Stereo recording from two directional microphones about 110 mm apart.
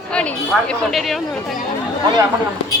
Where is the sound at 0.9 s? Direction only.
Centre (ahead or behind).